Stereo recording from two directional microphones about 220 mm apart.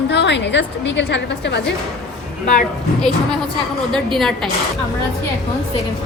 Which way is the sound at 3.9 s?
Centre (ahead or behind).